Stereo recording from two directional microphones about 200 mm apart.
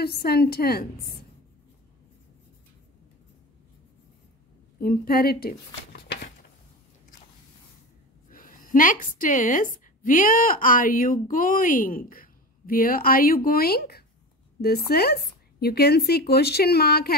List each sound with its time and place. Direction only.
0.0 s speech: 50° left (ahead or behind)
4.7 s speech: 50° left (ahead or behind)
8.3 s speech: 45° left (ahead or behind)